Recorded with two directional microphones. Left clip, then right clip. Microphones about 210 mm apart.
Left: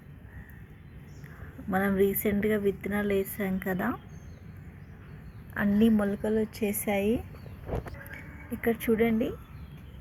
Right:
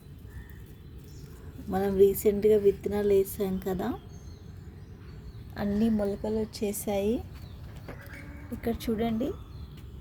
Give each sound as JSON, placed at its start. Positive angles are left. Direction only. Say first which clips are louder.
{"t": 1.7, "sound": "speech", "louder": "right 3 dB", "side_deg": -15}
{"t": 5.5, "sound": "a woman's voice", "louder": "left 3 dB", "side_deg": -15}
{"t": 8.6, "sound": "speech", "louder": "left 5 dB", "side_deg": -15}